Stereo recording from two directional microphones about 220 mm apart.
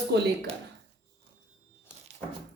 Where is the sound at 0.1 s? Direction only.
50° right (ahead or behind).